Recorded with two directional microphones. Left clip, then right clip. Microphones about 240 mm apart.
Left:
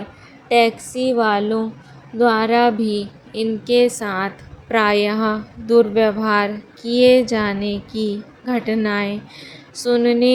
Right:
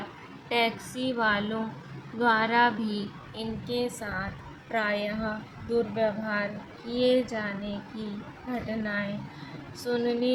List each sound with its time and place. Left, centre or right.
0.4 s a woman's voice: left